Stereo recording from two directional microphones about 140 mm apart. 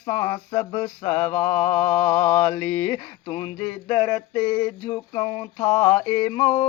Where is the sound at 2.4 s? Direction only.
30° left (ahead or behind).